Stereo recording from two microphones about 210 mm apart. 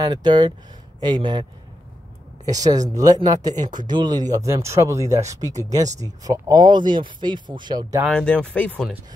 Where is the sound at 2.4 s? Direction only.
15° right (ahead or behind).